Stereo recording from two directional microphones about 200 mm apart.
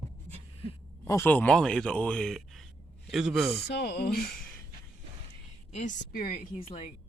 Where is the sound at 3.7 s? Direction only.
55° left (ahead or behind).